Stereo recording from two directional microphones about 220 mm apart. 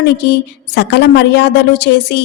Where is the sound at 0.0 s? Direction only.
50° left (ahead or behind).